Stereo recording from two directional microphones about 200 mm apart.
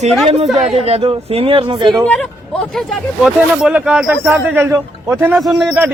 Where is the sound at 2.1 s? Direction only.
5° left (ahead or behind); by 5.3 s 15° right (ahead or behind).